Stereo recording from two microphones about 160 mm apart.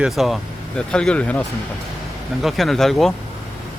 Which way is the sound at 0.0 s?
Centre (ahead or behind).